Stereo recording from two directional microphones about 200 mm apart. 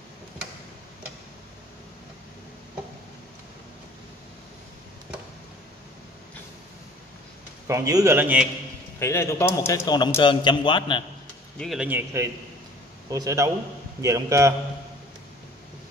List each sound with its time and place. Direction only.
7.6 s a man's voice: 15° right (ahead or behind)
9.0 s a man's voice: 15° left (ahead or behind)
11.5 s speech: centre (ahead or behind)
13.1 s a man's voice: 15° right (ahead or behind)